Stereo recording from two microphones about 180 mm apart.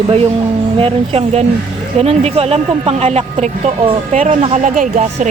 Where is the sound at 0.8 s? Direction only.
30° right (ahead or behind).